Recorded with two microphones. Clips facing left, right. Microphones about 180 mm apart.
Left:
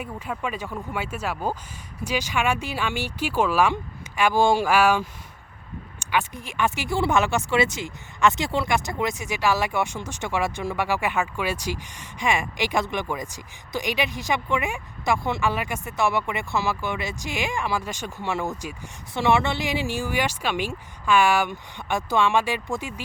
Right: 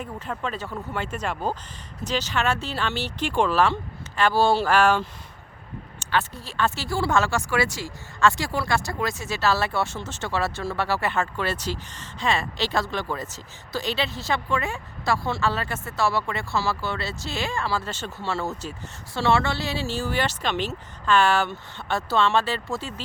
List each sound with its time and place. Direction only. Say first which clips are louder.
0.0 s speech: even; 10° left (ahead or behind)